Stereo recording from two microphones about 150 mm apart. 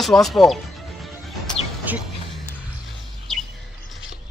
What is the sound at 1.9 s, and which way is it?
Speech, 10° right (ahead or behind).